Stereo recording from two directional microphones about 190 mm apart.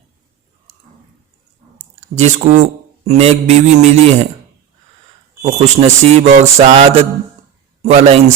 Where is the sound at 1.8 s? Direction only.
35° right (ahead or behind).